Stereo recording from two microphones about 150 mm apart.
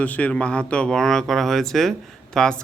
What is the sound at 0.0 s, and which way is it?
A man's voice, 10° left (ahead or behind).